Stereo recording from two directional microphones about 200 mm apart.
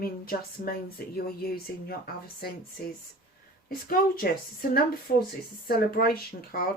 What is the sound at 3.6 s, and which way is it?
Speech, 45° left (ahead or behind).